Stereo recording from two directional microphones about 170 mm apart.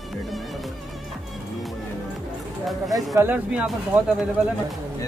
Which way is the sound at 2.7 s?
Centre (ahead or behind).